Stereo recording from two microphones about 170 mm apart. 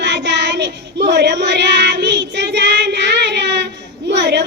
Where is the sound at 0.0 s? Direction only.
90° right.